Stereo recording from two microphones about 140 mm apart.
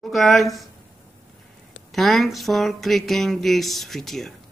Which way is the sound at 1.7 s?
Centre (ahead or behind).